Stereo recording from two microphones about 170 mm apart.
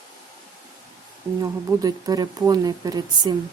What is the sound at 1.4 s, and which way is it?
Speech, 20° right (ahead or behind).